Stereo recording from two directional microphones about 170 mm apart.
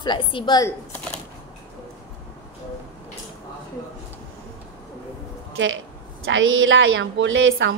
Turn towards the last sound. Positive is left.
turn(degrees=-90)